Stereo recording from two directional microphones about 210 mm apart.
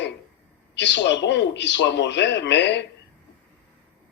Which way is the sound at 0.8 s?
55° left (ahead or behind).